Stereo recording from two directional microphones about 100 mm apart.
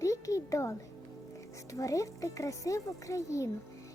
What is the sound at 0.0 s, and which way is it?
Music, 30° left (ahead or behind).